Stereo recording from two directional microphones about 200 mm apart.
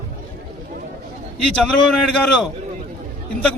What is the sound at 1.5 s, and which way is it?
A man's voice, 5° left (ahead or behind).